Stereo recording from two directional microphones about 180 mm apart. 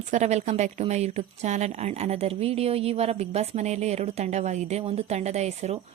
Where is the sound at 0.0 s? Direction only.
40° right (ahead or behind).